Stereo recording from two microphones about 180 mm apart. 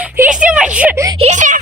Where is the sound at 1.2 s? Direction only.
45° right (ahead or behind).